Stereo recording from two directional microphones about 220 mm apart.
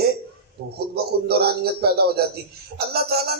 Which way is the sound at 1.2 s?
45° right (ahead or behind).